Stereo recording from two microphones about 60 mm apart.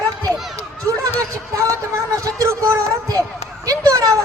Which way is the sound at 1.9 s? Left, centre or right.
Right.